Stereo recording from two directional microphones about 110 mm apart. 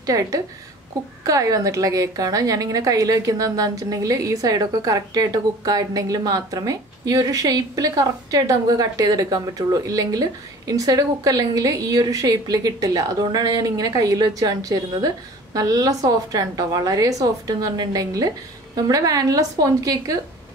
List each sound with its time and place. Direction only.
0.0 s a woman's voice: 30° right (ahead or behind)